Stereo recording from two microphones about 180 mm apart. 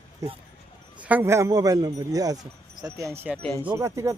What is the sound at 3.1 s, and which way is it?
Speech, 10° right (ahead or behind).